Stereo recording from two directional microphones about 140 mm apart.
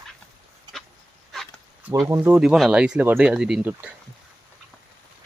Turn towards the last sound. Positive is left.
turn(degrees=-10)  # may be behind; listen again after turning